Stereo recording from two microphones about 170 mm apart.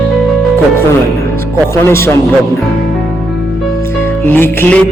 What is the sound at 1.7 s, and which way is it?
Music, 15° left (ahead or behind).